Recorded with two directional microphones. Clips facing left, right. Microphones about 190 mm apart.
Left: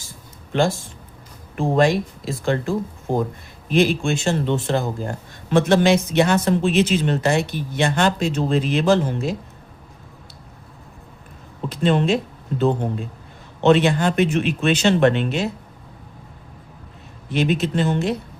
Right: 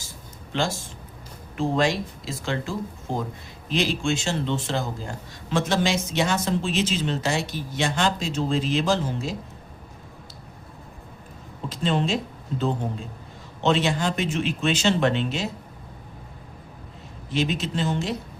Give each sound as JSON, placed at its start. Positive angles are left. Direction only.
{"t": 1.5, "sound": "speech", "side_deg": 55}
{"t": 11.7, "sound": "speech", "side_deg": 60}
{"t": 17.3, "sound": "speech", "side_deg": 60}